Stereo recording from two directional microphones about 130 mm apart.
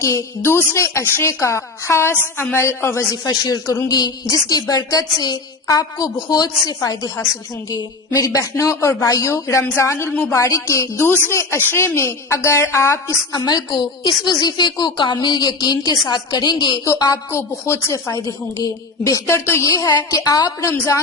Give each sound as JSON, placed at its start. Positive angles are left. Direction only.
{"t": 0.0, "sound": "a woman's voice", "side_deg": 25}
{"t": 10.1, "sound": "a woman's voice", "side_deg": 10}
{"t": 10.3, "sound": "a woman's voice", "side_deg": 25}